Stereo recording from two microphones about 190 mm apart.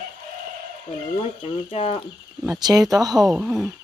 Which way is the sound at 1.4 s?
30° left (ahead or behind).